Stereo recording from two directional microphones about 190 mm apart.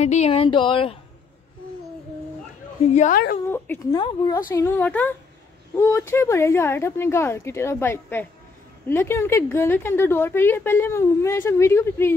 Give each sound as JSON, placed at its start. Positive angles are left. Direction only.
{"t": 0.0, "sound": "speech", "side_deg": 35}
{"t": 2.9, "sound": "a woman's voice", "side_deg": 40}
{"t": 3.4, "sound": "a woman's voice", "side_deg": 10}
{"t": 3.9, "sound": "speech", "side_deg": 20}
{"t": 4.6, "sound": "a woman's voice", "side_deg": 10}